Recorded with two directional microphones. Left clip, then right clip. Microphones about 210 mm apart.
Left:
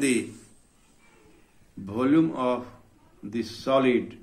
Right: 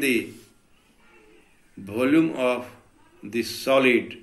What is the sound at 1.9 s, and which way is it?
Speech, 45° left (ahead or behind).